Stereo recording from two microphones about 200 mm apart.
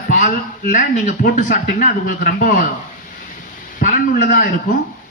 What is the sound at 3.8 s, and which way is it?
Speech, 40° left (ahead or behind).